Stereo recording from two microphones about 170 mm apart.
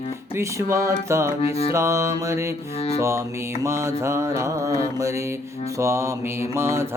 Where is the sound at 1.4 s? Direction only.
35° left (ahead or behind).